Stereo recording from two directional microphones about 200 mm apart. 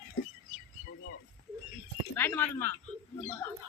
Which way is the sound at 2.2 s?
10° left (ahead or behind).